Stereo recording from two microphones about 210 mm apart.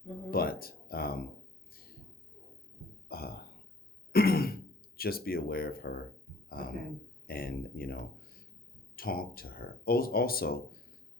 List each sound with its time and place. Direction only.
0.3 s speech: 45° left (ahead or behind)
1.7 s a sound: 45° left (ahead or behind)
3.1 s burping: 45° left (ahead or behind)
4.1 s throat clearing: 45° left (ahead or behind)
6.6 s speech: 45° left (ahead or behind)